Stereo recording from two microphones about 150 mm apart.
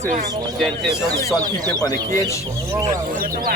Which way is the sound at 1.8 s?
25° left (ahead or behind).